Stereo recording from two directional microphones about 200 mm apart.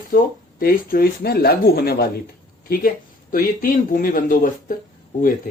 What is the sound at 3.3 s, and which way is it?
Speech, 45° left (ahead or behind).